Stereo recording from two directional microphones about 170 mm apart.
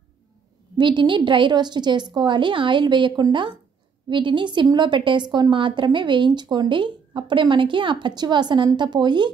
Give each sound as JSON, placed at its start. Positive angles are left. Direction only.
{"t": 0.7, "sound": "a woman's voice", "side_deg": -30}